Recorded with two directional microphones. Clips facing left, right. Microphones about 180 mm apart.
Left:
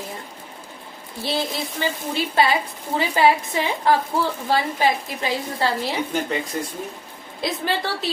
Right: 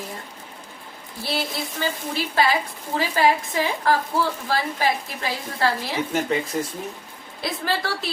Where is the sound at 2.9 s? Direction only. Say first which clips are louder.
Left 2 dB; 20° left (ahead or behind).